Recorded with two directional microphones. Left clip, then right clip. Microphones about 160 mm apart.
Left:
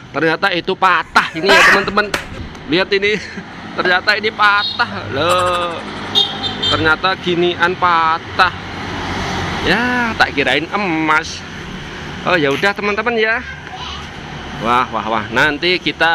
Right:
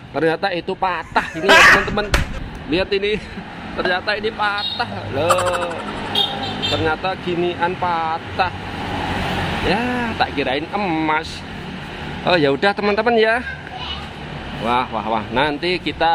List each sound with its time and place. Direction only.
0.1 s speech: 5° right (ahead or behind)
6.8 s speech: 5° left (ahead or behind)
9.7 s speech: centre (ahead or behind)
12.3 s speech: 20° right (ahead or behind)
14.6 s speech: 5° left (ahead or behind)